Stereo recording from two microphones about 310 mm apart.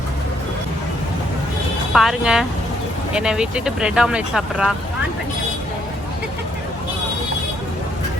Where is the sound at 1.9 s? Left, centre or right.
Centre.